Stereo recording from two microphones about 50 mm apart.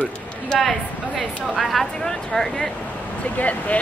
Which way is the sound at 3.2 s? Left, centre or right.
Left.